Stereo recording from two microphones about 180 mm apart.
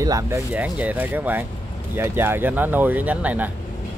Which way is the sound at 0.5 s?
10° right (ahead or behind).